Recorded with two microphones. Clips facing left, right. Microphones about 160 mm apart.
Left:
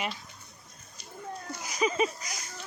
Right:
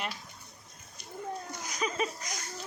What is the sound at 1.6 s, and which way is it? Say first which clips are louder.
Speech: left 6 dB; 5° left (ahead or behind).